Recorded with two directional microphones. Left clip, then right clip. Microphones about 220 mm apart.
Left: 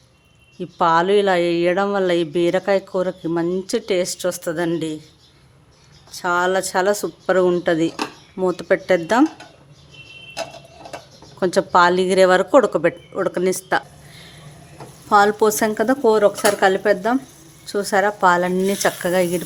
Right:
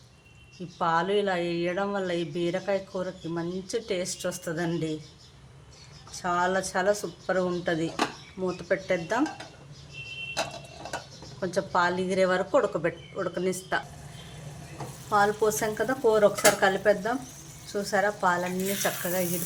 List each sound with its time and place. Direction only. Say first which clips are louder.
0.8 s speech: left 10 dB; 50° left (ahead or behind)
6.1 s speech: left 8 dB; 50° left (ahead or behind)
11.3 s speech: left 11 dB; 50° left (ahead or behind)
15.1 s speech: left 9 dB; 50° left (ahead or behind)